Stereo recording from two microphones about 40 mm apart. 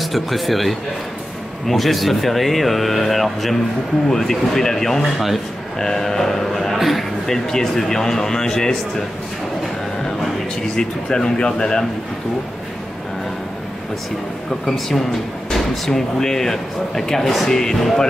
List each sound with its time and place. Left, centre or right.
0.0 s speech: centre
10.8 s speech: centre
14.7 s speech: centre